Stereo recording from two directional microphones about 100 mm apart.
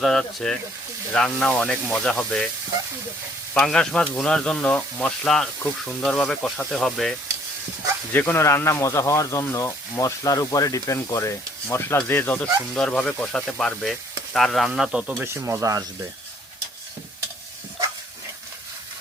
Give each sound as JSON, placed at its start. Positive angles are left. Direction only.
{"t": 0.0, "sound": "speech", "side_deg": 5}
{"t": 3.5, "sound": "speech", "side_deg": 5}
{"t": 8.1, "sound": "speech", "side_deg": 20}
{"t": 12.7, "sound": "speech", "side_deg": 5}
{"t": 14.7, "sound": "speech", "side_deg": -10}
{"t": 15.2, "sound": "speech", "side_deg": -25}